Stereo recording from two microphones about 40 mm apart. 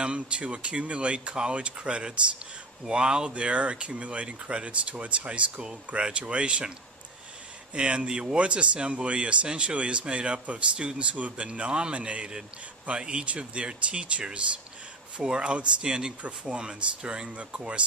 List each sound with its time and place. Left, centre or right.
0.0 s speech: right
3.3 s speech: right
7.7 s speech: right